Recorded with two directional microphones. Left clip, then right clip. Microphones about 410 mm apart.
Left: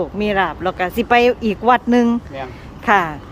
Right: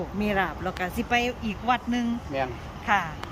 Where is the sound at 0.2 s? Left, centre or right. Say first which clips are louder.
Left 8 dB; centre.